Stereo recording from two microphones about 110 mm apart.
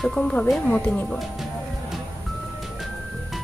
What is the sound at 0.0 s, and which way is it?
Speech, 5° left (ahead or behind).